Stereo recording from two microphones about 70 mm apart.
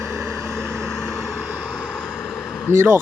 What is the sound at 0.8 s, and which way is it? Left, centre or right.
Vehicle, centre.